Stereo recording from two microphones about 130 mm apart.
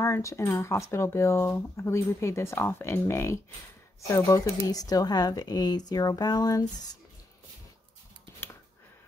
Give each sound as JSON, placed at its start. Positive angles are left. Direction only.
{"t": 0.0, "sound": "speech", "side_deg": 25}